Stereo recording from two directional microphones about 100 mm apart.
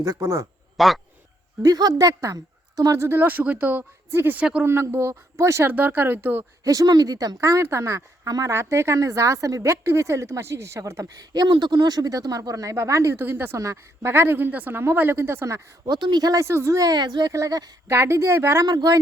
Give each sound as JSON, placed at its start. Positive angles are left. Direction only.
{"t": 0.0, "sound": "speech", "side_deg": -30}
{"t": 0.8, "sound": "speech", "side_deg": 0}
{"t": 1.6, "sound": "speech", "side_deg": -40}
{"t": 4.4, "sound": "speech", "side_deg": -10}
{"t": 4.6, "sound": "speech", "side_deg": -25}
{"t": 6.7, "sound": "speech", "side_deg": -40}
{"t": 15.9, "sound": "speech", "side_deg": -45}
{"t": 17.3, "sound": "speech", "side_deg": -35}
{"t": 17.8, "sound": "speech", "side_deg": -25}
{"t": 18.6, "sound": "speech", "side_deg": -40}